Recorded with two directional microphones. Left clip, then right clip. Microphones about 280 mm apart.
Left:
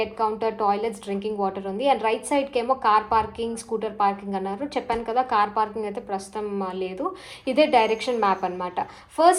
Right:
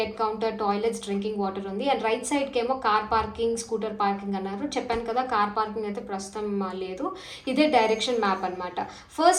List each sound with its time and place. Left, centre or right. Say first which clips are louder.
0.2 s a woman's voice: left 5 dB; centre
5.4 s a woman's voice: left 3 dB; left
6.1 s a woman's voice: left 2 dB; centre